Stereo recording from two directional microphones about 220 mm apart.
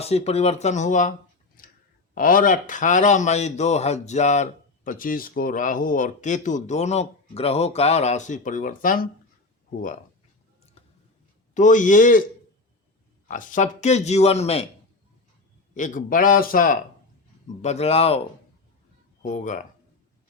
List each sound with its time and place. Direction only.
0.0 s speech: 30° left (ahead or behind)
1.6 s clicking: 40° left (ahead or behind)
2.1 s a man's voice: 40° left (ahead or behind)
10.8 s a sound: 25° left (ahead or behind)
11.5 s a man's voice: 35° left (ahead or behind)
13.2 s a man's voice: 35° left (ahead or behind)
15.7 s a man's voice: 35° left (ahead or behind)
17.6 s speech: 30° left (ahead or behind)
19.2 s a man's voice: 35° left (ahead or behind)